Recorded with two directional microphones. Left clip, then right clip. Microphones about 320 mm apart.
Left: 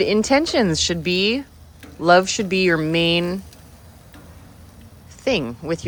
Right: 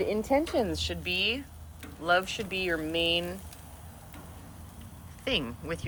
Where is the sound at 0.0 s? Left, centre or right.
Left.